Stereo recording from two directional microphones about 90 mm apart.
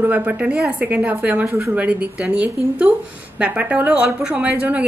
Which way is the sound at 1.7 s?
15° right (ahead or behind).